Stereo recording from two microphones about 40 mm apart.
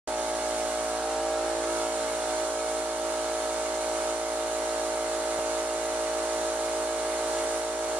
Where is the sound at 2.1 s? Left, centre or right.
Right.